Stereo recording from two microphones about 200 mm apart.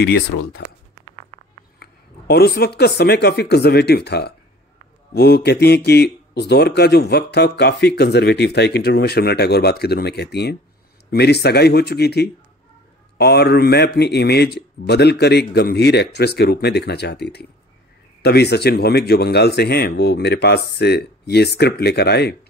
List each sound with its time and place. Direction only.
0.0 s speech: 60° left (ahead or behind)
1.8 s a sound: 55° left (ahead or behind)
3.0 s speech: 55° left (ahead or behind)